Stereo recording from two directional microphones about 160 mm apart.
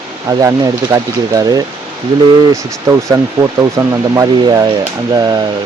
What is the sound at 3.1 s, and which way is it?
Speech, 20° right (ahead or behind).